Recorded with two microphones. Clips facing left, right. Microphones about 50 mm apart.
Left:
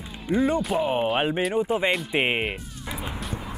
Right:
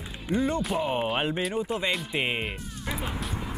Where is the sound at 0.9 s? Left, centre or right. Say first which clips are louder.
Left 4 dB; centre.